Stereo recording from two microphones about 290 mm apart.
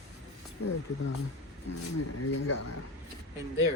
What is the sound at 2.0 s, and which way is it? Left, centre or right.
Speech, left.